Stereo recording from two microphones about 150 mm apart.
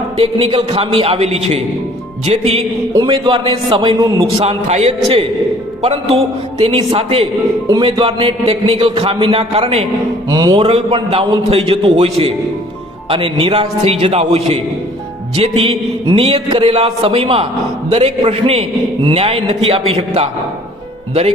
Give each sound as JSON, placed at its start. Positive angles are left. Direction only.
{"t": 0.2, "sound": "a man's voice", "side_deg": -40}
{"t": 3.1, "sound": "a man's voice", "side_deg": -30}
{"t": 4.4, "sound": "a man's voice", "side_deg": -45}
{"t": 10.2, "sound": "music", "side_deg": -25}
{"t": 10.6, "sound": "a man's voice", "side_deg": -40}